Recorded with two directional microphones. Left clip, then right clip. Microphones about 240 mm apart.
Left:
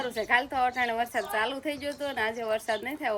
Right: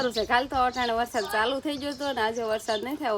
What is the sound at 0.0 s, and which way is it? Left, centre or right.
A woman's voice, centre.